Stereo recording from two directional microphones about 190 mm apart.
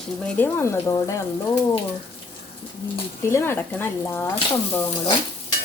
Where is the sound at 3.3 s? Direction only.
10° left (ahead or behind).